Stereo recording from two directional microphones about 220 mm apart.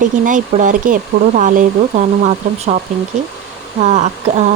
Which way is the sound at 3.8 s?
30° right (ahead or behind).